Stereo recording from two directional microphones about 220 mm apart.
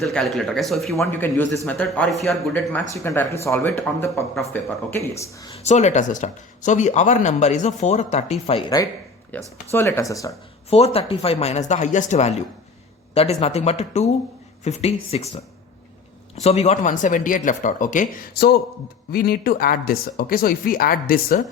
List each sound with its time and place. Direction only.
0.0 s speech: centre (ahead or behind)
0.9 s speech: 10° left (ahead or behind)
5.6 s speech: 30° left (ahead or behind)
9.3 s speech: 5° left (ahead or behind)
10.7 s speech: 30° left (ahead or behind)